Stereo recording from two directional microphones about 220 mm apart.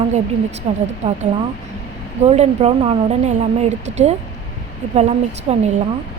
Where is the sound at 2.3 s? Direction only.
30° right (ahead or behind).